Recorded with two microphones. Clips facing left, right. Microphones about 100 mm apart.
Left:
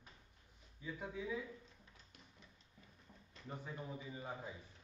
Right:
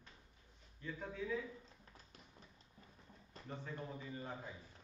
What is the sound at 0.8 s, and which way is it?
Speech, 10° left (ahead or behind).